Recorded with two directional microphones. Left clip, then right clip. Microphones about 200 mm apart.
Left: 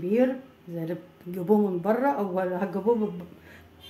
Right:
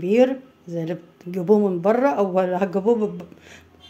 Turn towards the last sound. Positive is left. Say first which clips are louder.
# right 6 dB
turn(degrees=-45)  # may be behind; listen again after turning